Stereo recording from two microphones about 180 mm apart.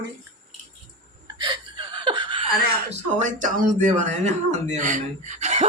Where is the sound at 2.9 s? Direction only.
45° right (ahead or behind).